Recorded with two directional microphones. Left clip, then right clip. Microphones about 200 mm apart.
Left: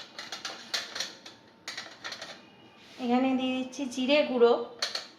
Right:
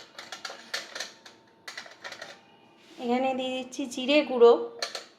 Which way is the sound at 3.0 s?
50° right (ahead or behind).